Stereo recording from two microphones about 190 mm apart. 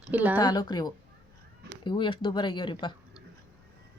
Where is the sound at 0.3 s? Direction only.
20° left (ahead or behind).